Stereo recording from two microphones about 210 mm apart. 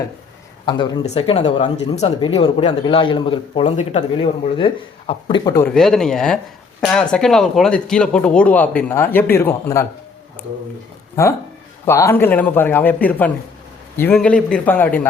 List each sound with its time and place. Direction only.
0.6 s speech: 20° left (ahead or behind)
5.6 s speech: centre (ahead or behind)
11.9 s speech: 10° left (ahead or behind)